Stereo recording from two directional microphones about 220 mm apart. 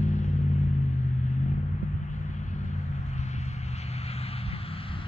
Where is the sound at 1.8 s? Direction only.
35° left (ahead or behind).